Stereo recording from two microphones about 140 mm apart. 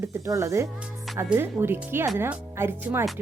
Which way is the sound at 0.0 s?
20° right (ahead or behind).